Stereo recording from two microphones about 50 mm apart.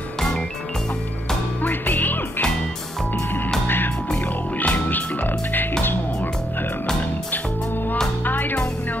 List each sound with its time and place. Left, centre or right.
1.6 s music: left
3.6 s music: left
8.3 s music: left